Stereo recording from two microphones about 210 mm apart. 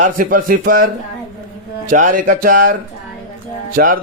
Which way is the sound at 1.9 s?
40° right (ahead or behind).